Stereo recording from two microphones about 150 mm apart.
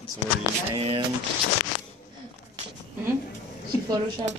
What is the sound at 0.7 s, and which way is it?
Speech, 35° right (ahead or behind).